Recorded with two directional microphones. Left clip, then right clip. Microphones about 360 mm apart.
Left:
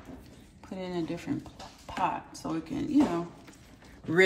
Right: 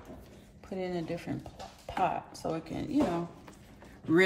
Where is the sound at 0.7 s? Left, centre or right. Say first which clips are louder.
Even; centre.